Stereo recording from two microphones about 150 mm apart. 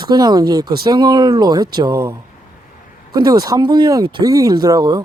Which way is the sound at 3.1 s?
25° right (ahead or behind).